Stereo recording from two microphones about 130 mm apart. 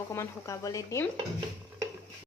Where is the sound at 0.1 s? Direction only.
20° left (ahead or behind).